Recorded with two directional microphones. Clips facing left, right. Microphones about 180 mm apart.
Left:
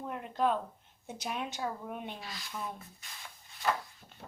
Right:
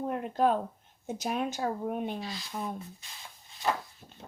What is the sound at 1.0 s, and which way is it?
Speech, 45° right (ahead or behind).